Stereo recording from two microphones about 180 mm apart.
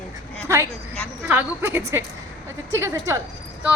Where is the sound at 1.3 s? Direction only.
10° right (ahead or behind).